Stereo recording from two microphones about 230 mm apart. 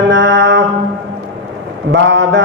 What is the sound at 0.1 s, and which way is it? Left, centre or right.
Music, right.